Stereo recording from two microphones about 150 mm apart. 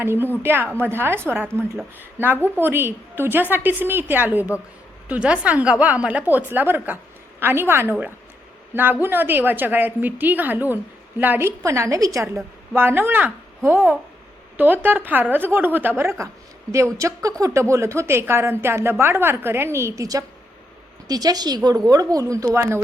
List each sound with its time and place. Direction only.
0.0 s a woman's voice: 15° right (ahead or behind)